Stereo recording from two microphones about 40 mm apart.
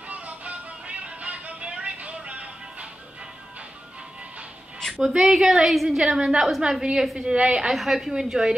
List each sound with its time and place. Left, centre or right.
0.1 s music: right
5.0 s a woman's voice: centre
7.7 s a woman's voice: centre
8.1 s a woman's voice: centre